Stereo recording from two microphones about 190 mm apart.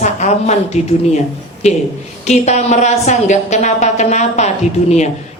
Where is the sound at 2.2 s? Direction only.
35° left (ahead or behind).